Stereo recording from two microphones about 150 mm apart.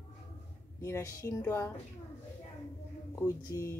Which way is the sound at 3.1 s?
20° left (ahead or behind).